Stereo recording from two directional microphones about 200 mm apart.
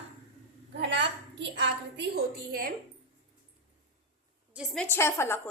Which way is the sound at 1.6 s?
55° right (ahead or behind).